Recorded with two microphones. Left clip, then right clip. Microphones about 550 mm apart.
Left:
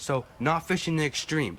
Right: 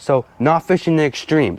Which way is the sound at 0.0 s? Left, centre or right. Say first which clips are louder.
Right 12 dB; right.